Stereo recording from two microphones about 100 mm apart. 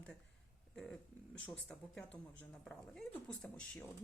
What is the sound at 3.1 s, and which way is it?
Speech, 5° left (ahead or behind).